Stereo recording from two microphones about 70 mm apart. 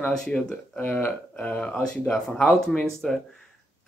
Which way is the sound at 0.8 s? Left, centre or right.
Left.